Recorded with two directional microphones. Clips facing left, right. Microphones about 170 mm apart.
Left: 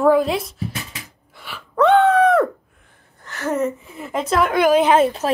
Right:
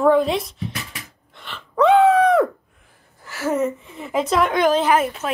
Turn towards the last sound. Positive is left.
turn(degrees=30)  # may be behind; listen again after turning